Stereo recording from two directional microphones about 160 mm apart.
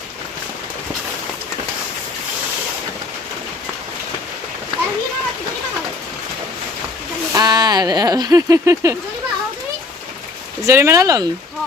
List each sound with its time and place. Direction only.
7.3 s speech: 25° right (ahead or behind)
10.7 s speech: 15° right (ahead or behind)